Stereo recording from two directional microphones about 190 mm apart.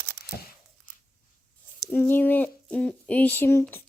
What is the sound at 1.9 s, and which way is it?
Speech, 10° left (ahead or behind).